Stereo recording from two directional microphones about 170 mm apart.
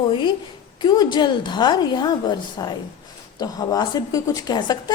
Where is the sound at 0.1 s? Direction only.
30° left (ahead or behind).